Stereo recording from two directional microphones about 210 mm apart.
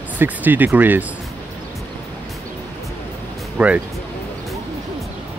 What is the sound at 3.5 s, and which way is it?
Speech, 5° right (ahead or behind).